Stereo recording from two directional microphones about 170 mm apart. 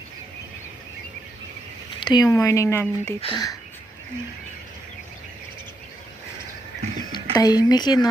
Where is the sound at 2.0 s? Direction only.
25° left (ahead or behind).